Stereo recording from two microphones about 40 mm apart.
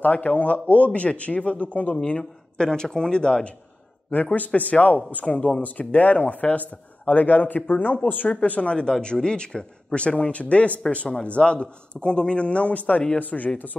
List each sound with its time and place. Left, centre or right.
0.0 s speech: left
2.0 s a man's voice: left
4.1 s a man's voice: left